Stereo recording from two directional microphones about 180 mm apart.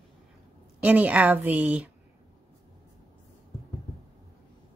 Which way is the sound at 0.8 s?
10° right (ahead or behind).